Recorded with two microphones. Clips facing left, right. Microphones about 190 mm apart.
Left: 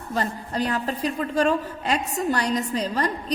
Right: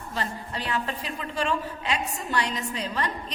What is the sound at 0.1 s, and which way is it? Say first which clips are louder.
A woman's voice: left 6 dB; 45° left (ahead or behind).